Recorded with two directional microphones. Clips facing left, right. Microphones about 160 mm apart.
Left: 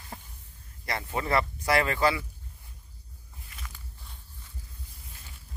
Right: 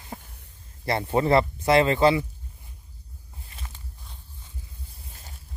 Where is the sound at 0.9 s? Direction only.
30° right (ahead or behind).